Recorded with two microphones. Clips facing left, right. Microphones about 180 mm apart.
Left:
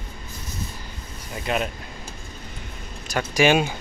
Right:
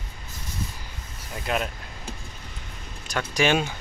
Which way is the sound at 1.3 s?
Centre (ahead or behind).